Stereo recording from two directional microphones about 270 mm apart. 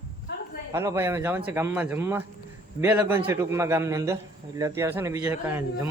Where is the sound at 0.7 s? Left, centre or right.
Centre.